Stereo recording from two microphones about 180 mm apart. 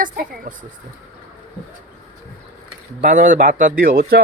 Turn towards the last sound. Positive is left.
turn(degrees=-55)  # may be behind; listen again after turning